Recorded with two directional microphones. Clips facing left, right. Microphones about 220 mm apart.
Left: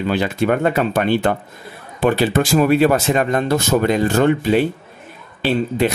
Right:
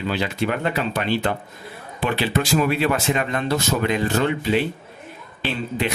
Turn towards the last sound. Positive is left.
turn(degrees=40)  # may be behind; listen again after turning